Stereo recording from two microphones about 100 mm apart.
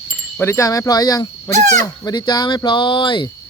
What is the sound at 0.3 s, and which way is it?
Speech, 25° left (ahead or behind).